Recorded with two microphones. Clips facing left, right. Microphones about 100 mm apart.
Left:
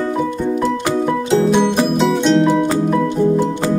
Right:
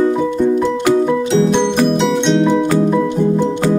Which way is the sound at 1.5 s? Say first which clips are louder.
Right 1 dB; 5° left (ahead or behind).